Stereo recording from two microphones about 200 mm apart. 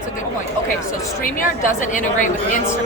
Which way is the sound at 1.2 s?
45° left (ahead or behind).